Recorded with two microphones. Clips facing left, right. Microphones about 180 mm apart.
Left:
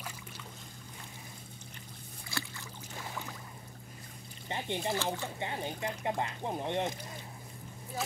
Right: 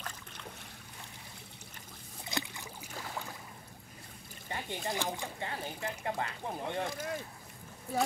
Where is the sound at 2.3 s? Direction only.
20° right (ahead or behind).